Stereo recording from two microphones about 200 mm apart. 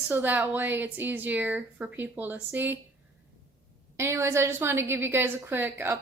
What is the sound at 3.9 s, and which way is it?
A woman's voice, 15° right (ahead or behind).